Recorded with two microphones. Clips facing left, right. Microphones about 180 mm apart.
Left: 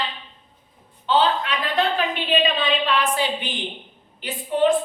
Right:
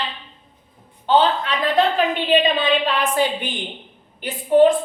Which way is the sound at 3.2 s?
50° right (ahead or behind).